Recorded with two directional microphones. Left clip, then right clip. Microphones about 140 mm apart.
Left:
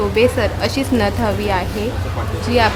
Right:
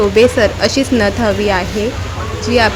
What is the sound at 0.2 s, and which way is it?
Speech, 30° right (ahead or behind).